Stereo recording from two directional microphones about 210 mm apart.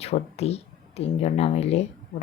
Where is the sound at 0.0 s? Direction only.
30° left (ahead or behind).